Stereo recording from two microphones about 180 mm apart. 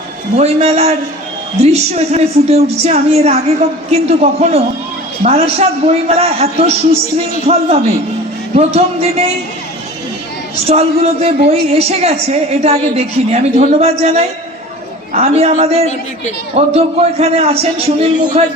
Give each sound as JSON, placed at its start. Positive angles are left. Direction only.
{"t": 0.3, "sound": "a woman's voice", "side_deg": -35}
{"t": 10.7, "sound": "a woman's voice", "side_deg": -35}